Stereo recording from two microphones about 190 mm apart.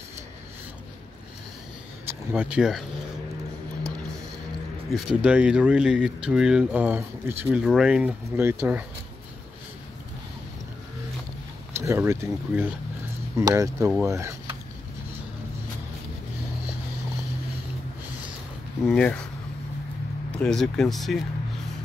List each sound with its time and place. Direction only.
2.0 s speech: 5° right (ahead or behind)
4.9 s speech: 5° right (ahead or behind)
11.7 s speech: 15° right (ahead or behind)
18.9 s speech: 5° left (ahead or behind)
20.2 s speech: 5° left (ahead or behind)